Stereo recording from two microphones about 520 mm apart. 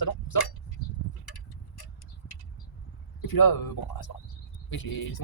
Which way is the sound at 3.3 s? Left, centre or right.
Left.